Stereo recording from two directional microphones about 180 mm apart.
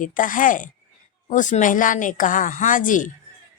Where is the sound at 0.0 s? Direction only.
45° left (ahead or behind).